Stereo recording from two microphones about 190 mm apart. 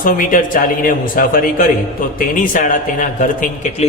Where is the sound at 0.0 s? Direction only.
45° left (ahead or behind).